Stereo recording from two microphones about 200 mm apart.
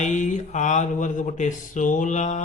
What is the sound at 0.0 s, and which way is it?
Speech, 35° left (ahead or behind).